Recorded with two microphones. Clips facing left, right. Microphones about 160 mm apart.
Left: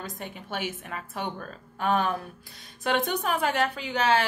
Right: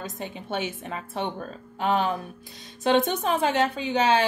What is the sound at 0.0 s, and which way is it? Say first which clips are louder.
Speech: right 3 dB; 25° right (ahead or behind).